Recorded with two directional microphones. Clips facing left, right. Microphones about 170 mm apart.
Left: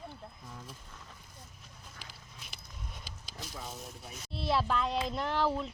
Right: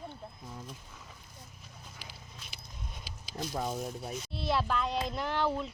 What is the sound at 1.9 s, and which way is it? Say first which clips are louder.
Walk: right 2 dB; 5° right (ahead or behind).